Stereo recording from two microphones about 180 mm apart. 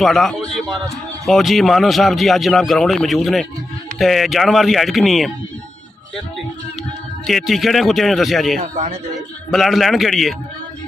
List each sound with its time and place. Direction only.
0.0 s a man's voice: centre (ahead or behind)
7.2 s a man's voice: centre (ahead or behind)
8.5 s speech: 45° right (ahead or behind)
9.5 s a man's voice: centre (ahead or behind)